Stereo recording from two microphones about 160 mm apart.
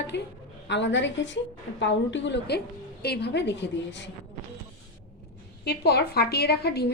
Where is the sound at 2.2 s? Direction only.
90° left.